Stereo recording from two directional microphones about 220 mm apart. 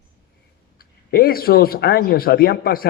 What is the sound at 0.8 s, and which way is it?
A man's voice, 40° left (ahead or behind).